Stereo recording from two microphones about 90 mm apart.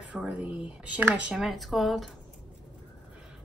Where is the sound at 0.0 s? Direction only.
15° right (ahead or behind).